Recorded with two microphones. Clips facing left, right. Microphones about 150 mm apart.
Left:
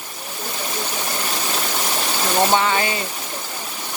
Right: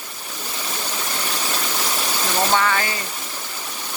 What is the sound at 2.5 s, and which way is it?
Speech, 20° left (ahead or behind).